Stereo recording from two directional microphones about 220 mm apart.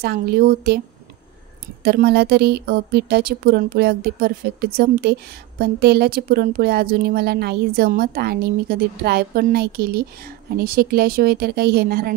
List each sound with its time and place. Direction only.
0.0 s speech: 45° right (ahead or behind)
1.8 s speech: 45° right (ahead or behind)